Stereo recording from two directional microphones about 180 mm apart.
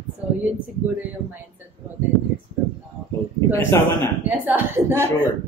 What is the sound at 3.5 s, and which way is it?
Speech, 15° left (ahead or behind).